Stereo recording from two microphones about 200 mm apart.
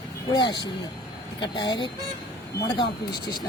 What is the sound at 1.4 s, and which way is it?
Speech, 20° left (ahead or behind).